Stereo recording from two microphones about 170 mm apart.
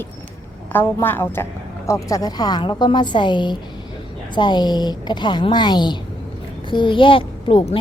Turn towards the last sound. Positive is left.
turn(degrees=30)  # may be behind; listen again after turning